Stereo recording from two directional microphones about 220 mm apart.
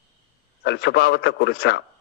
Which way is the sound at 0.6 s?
50° left (ahead or behind).